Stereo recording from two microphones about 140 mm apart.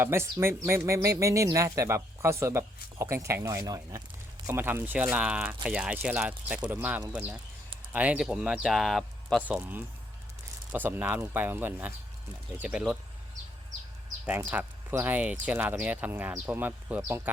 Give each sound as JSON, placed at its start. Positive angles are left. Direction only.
{"t": 0.0, "sound": "speech", "side_deg": -20}
{"t": 9.4, "sound": "speech", "side_deg": -10}
{"t": 14.3, "sound": "speech", "side_deg": -10}